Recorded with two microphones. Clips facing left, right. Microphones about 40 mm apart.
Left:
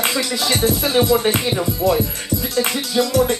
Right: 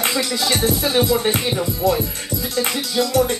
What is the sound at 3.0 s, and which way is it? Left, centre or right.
Music, left.